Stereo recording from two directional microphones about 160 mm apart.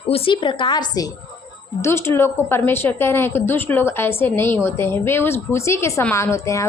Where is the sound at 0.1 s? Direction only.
35° left (ahead or behind).